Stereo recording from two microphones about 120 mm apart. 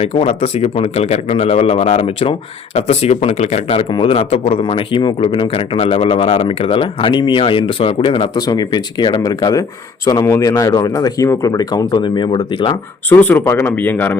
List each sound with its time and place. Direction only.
0.0 s a man's voice: 60° left (ahead or behind)
3.9 s a man's voice: 50° left (ahead or behind)
4.6 s speech: 45° left (ahead or behind)
13.1 s speech: 15° left (ahead or behind)